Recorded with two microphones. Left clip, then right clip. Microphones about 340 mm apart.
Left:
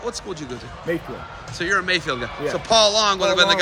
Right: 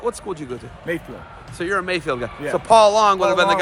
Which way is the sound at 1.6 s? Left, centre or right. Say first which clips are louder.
Left 2 dB; centre.